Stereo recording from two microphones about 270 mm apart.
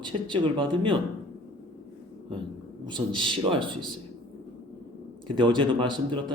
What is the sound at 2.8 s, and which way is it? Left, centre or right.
Speech, centre.